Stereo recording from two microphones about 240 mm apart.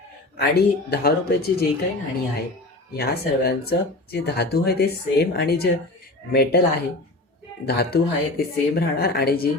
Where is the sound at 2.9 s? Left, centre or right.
Left.